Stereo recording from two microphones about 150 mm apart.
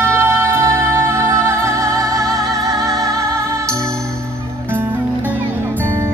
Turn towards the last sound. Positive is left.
turn(degrees=-15)  # may be behind; listen again after turning